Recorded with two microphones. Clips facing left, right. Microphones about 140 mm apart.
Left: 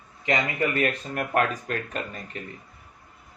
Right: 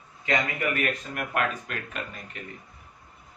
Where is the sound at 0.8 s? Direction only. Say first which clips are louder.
Left 3 dB; 35° left (ahead or behind).